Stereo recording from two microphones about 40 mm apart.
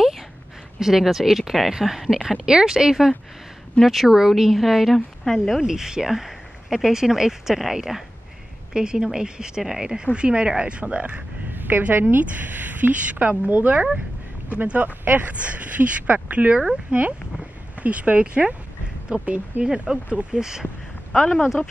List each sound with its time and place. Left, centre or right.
0.7 s speech: centre
3.8 s speech: centre
4.9 s a woman's voice: centre
5.6 s speech: centre; by 11.2 s right
11.5 s a woman's voice: right
12.2 s a woman's voice: right
19.6 s speech: right
20.3 s speech: centre